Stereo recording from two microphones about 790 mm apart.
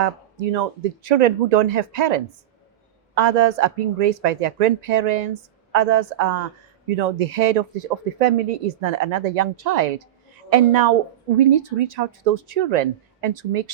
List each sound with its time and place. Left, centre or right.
0.0 s speech: right